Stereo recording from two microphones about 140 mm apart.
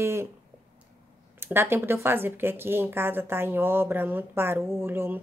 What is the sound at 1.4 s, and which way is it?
A woman's voice, 15° right (ahead or behind).